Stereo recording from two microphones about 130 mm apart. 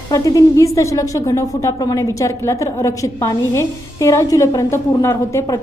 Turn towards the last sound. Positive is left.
turn(degrees=25)  # may be behind; listen again after turning